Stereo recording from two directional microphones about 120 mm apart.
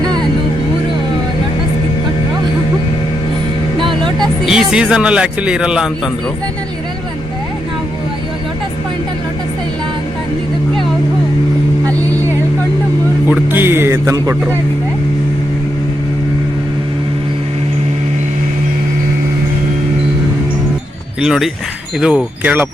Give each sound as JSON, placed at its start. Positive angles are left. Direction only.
{"t": 0.0, "sound": "music", "side_deg": -35}
{"t": 3.8, "sound": "music", "side_deg": -45}
{"t": 4.4, "sound": "speech", "side_deg": -5}
{"t": 13.5, "sound": "speech", "side_deg": -20}
{"t": 21.2, "sound": "speech", "side_deg": -5}